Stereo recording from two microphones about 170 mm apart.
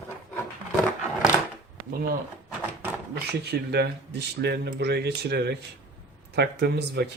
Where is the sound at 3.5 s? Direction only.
75° right (ahead or behind).